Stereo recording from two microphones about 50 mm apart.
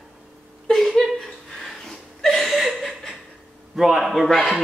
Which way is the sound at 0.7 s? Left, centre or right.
Centre.